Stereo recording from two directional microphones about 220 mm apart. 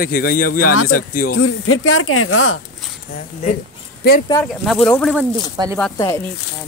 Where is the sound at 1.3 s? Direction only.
70° left (ahead or behind).